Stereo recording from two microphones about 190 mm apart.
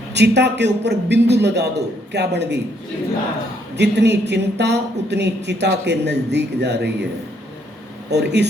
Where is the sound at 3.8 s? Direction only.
65° right (ahead or behind).